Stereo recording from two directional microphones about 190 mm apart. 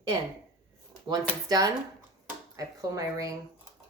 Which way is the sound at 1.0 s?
20° right (ahead or behind).